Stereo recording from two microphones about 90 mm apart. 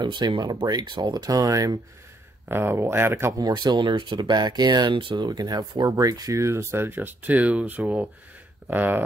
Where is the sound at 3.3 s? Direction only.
50° right (ahead or behind).